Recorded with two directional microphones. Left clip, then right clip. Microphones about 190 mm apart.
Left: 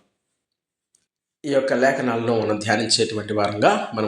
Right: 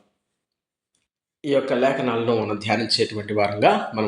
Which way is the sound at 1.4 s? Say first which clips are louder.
Left 1 dB; 15° left (ahead or behind).